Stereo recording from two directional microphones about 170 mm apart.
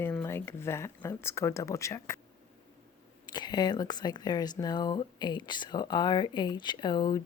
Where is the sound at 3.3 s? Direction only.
25° left (ahead or behind).